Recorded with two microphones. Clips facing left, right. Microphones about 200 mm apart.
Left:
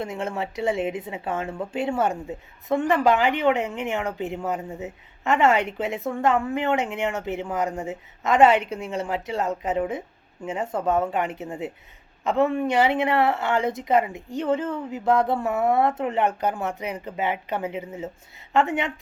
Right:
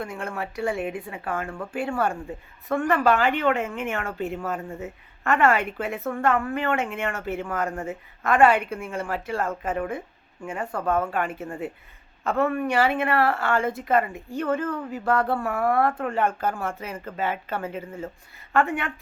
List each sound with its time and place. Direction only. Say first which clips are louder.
0.0 s a woman's voice: left 3 dB; 20° left (ahead or behind)